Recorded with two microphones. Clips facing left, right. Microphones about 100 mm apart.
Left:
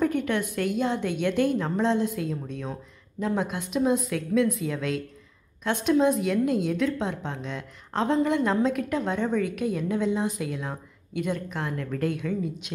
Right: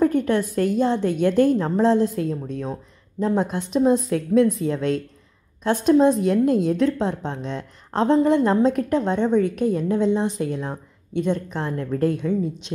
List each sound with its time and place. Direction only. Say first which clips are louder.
0.0 s a woman's voice: right 6 dB; 35° right (ahead or behind)